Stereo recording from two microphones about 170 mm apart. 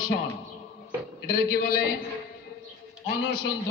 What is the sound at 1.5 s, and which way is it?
Speech, 65° left (ahead or behind).